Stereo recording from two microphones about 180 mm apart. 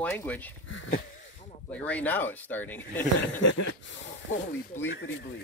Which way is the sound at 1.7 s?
10° left (ahead or behind).